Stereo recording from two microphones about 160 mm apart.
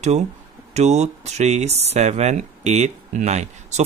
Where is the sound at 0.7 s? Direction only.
45° right (ahead or behind).